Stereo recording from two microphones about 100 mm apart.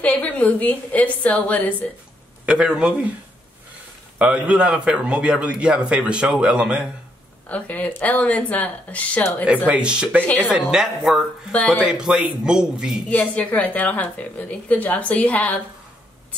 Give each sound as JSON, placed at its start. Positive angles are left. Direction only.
{"t": 0.0, "sound": "a woman's voice", "side_deg": 15}
{"t": 2.4, "sound": "a man's voice", "side_deg": -10}
{"t": 4.2, "sound": "a man's voice", "side_deg": -10}
{"t": 7.4, "sound": "a woman's voice", "side_deg": 15}
{"t": 9.7, "sound": "a man's voice", "side_deg": -10}
{"t": 11.5, "sound": "a woman's voice", "side_deg": 15}
{"t": 11.9, "sound": "a man's voice", "side_deg": -5}
{"t": 13.1, "sound": "a woman's voice", "side_deg": 15}